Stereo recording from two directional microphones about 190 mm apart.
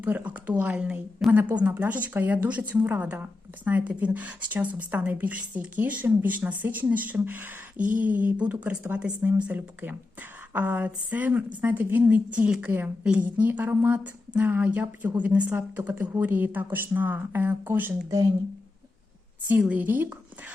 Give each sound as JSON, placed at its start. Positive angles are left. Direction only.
{"t": 0.0, "sound": "a woman's voice", "side_deg": -10}
{"t": 7.8, "sound": "a sound", "side_deg": -45}
{"t": 8.2, "sound": "a woman's voice", "side_deg": -10}
{"t": 19.5, "sound": "a woman's voice", "side_deg": -10}